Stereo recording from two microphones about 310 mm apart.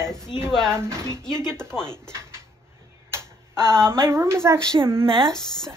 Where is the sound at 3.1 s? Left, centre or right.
Centre.